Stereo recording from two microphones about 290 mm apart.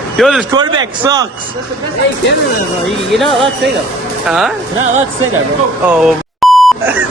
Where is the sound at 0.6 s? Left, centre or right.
Centre.